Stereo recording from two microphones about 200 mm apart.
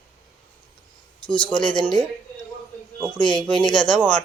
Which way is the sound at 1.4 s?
20° left (ahead or behind).